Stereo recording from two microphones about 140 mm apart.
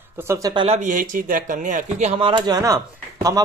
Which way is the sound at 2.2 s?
30° right (ahead or behind).